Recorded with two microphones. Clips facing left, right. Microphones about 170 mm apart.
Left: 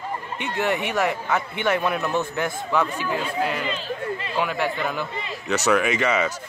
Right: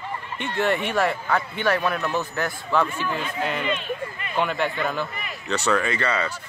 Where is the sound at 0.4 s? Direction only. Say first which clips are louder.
Right 1 dB; 15° left (ahead or behind).